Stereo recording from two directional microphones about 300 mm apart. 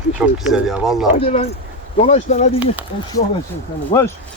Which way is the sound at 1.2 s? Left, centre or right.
Left.